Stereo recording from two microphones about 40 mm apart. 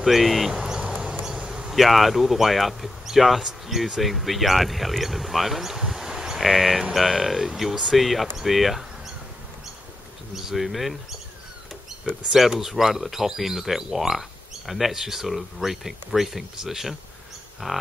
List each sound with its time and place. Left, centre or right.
0.0 s speech: centre
0.7 s a sound: centre
1.2 s insect: centre
1.7 s speech: centre
10.3 s speech: centre
12.3 s speech: centre